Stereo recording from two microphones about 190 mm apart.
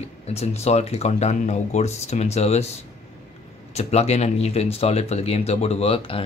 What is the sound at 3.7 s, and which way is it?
Speech, 35° left (ahead or behind).